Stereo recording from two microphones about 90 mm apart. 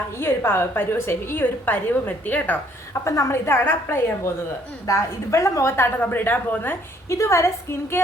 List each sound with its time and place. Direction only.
0.2 s a woman's voice: 25° left (ahead or behind)
3.0 s a woman's voice: 35° left (ahead or behind)
7.2 s a woman's voice: 35° left (ahead or behind)